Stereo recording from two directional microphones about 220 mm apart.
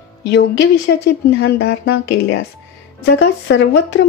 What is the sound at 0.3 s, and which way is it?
Speech, 55° left (ahead or behind).